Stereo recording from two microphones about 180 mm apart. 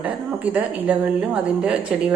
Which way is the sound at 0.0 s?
10° right (ahead or behind).